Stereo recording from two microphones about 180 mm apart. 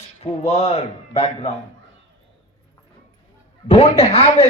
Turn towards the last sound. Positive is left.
turn(degrees=35)  # may be behind; listen again after turning